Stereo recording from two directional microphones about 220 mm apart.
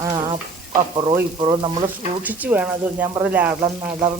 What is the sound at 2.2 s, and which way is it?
Speech, 5° right (ahead or behind).